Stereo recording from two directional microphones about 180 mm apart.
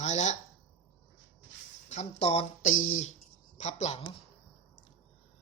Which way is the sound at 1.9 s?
35° left (ahead or behind).